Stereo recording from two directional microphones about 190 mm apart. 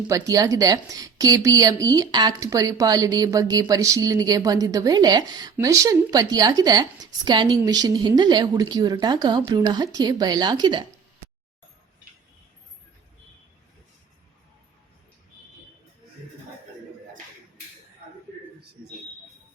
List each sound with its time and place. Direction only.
0.1 s a woman's voice: 20° right (ahead or behind)